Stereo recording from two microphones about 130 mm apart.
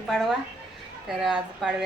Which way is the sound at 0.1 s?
Centre (ahead or behind).